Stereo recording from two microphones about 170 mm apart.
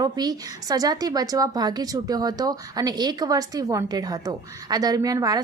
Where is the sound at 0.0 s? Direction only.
25° right (ahead or behind).